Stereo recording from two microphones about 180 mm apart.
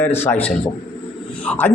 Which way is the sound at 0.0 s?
10° left (ahead or behind).